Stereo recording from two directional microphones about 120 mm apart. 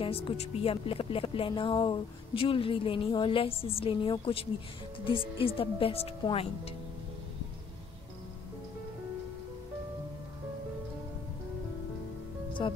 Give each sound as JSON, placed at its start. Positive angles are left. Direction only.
{"t": 0.0, "sound": "speech", "side_deg": 55}